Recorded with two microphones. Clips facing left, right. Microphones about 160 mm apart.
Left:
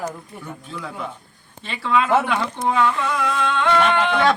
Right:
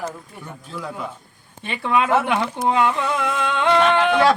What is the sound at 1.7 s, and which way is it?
Speech, 15° right (ahead or behind).